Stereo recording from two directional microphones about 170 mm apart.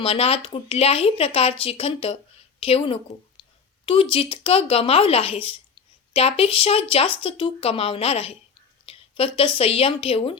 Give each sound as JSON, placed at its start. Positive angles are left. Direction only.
{"t": 0.0, "sound": "speech", "side_deg": 35}